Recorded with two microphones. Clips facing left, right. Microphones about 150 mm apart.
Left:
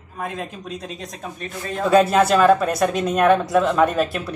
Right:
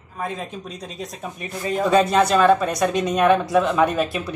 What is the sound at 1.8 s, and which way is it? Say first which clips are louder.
Speech: left 2 dB; centre (ahead or behind).